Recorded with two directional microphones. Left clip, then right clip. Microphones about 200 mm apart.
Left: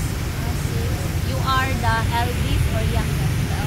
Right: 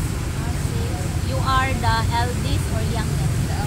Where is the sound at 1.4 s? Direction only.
10° left (ahead or behind).